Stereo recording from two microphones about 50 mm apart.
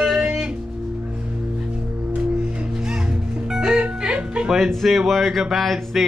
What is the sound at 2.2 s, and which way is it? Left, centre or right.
Music, right.